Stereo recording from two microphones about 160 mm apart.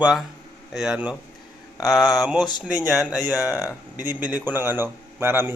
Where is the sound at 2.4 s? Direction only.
25° left (ahead or behind).